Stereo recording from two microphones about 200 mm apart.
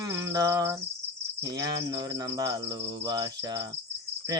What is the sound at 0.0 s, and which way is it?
Cricket, 15° right (ahead or behind).